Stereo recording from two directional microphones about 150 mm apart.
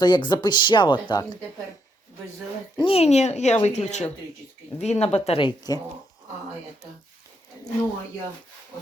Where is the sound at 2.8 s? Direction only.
40° left (ahead or behind).